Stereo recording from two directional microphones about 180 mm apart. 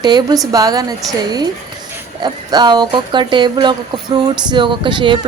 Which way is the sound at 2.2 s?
25° right (ahead or behind).